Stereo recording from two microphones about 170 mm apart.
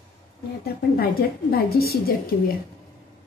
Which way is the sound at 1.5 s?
65° left (ahead or behind).